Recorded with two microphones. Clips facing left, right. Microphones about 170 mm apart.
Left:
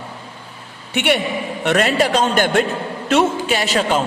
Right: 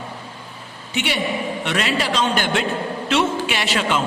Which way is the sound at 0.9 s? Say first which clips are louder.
Left 4 dB; 60° left (ahead or behind).